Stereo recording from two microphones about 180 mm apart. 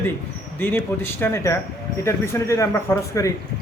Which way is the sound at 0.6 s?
10° left (ahead or behind).